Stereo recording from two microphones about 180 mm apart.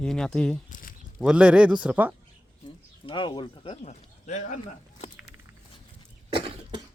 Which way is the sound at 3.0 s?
25° left (ahead or behind).